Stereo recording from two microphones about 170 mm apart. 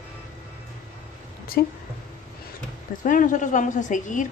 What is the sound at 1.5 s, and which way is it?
Speech, 60° left (ahead or behind).